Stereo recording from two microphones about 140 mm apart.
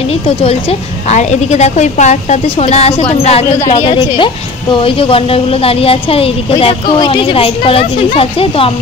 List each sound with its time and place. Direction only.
0.4 s a woman's voice: 45° left (ahead or behind)